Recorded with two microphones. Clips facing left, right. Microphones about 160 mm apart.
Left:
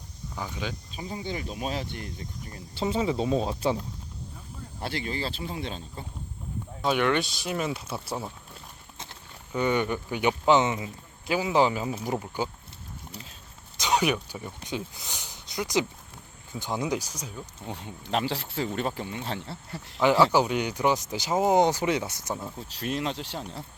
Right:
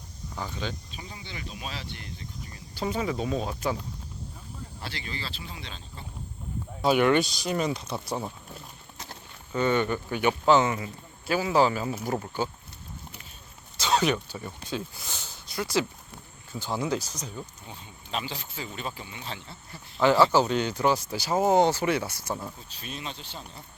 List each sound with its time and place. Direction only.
0.3 s speech: 10° left (ahead or behind)
0.9 s speech: 40° left (ahead or behind)
2.7 s speech: 25° left (ahead or behind)
4.8 s speech: 50° left (ahead or behind)
6.8 s speech: 5° right (ahead or behind)
9.5 s speech: 15° left (ahead or behind)
13.7 s speech: 15° left (ahead or behind)
17.4 s speech: 70° left (ahead or behind)
20.0 s speech: 15° left (ahead or behind)
22.5 s speech: 75° left (ahead or behind)